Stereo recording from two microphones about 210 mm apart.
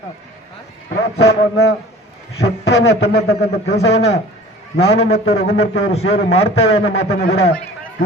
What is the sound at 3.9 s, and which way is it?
A man's voice, 30° left (ahead or behind).